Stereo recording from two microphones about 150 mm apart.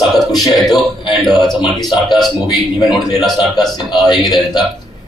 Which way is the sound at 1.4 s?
Centre (ahead or behind).